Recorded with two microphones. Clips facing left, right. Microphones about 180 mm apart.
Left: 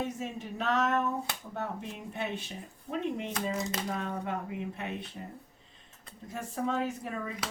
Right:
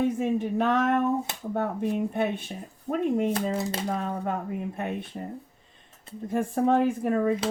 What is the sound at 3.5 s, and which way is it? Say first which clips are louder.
Speech: right 5 dB; 30° right (ahead or behind).